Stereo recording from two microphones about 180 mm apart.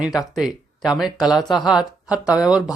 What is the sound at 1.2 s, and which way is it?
Speech, 25° left (ahead or behind).